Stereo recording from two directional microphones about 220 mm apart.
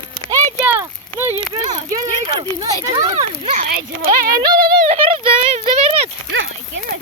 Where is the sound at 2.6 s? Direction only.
15° right (ahead or behind).